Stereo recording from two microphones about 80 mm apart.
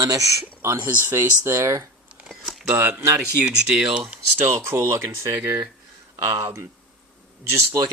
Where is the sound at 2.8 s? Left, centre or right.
Right.